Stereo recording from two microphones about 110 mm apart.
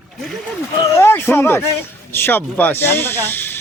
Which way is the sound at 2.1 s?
20° left (ahead or behind).